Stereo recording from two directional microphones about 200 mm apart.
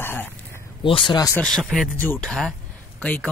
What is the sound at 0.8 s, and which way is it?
Speech, 25° left (ahead or behind).